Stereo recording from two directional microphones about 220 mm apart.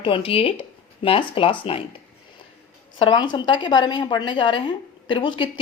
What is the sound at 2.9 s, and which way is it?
A woman's voice, 20° left (ahead or behind).